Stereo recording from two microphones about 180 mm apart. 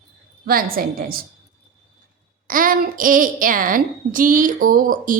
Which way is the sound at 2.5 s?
50° right (ahead or behind).